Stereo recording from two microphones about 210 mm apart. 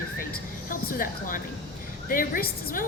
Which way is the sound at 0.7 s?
40° left (ahead or behind).